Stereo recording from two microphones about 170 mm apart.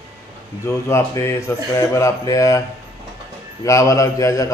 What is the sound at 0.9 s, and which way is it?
A man's voice, 15° left (ahead or behind).